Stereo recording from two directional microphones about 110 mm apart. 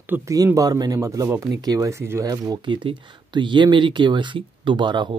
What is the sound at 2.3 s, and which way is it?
Speech, 40° right (ahead or behind).